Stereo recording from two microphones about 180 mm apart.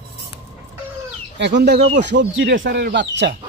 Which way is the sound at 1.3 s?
75° right (ahead or behind).